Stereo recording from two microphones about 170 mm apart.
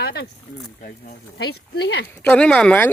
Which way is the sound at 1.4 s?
75° left (ahead or behind).